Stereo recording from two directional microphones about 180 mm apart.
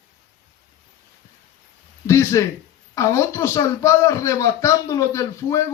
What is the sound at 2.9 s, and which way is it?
A man's voice, 15° left (ahead or behind).